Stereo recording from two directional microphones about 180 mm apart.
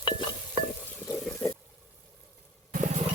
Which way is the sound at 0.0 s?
25° left (ahead or behind).